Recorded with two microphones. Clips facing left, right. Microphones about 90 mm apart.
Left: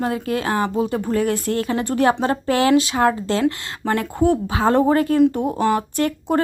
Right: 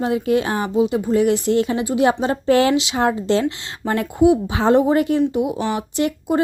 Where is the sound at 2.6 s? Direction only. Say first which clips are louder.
Left 2 dB; 20° right (ahead or behind).